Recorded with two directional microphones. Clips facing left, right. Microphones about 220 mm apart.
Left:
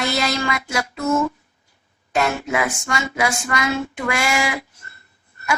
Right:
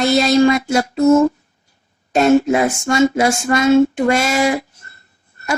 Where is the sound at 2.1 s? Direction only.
30° right (ahead or behind).